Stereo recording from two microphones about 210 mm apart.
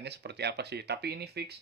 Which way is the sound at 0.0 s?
55° right (ahead or behind).